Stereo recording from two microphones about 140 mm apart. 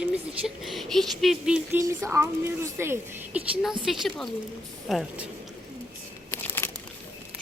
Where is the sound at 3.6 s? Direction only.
Centre (ahead or behind).